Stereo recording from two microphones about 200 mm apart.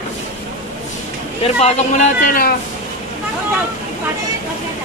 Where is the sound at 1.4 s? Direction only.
35° left (ahead or behind).